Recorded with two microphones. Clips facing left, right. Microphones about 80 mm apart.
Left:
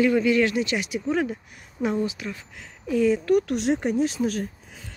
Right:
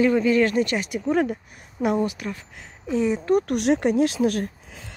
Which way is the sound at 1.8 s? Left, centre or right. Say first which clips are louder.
Right 3 dB; right.